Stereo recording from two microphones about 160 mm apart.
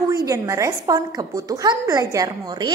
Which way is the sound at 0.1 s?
20° right (ahead or behind).